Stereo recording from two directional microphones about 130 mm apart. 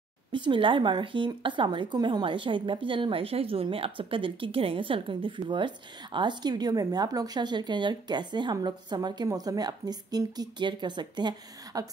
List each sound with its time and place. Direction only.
0.3 s a woman's voice: 40° right (ahead or behind)